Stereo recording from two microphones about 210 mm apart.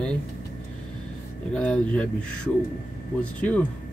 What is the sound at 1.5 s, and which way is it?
Speech, 5° left (ahead or behind).